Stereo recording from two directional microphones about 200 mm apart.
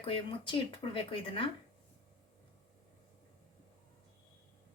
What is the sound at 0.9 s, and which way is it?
Speech, 25° left (ahead or behind).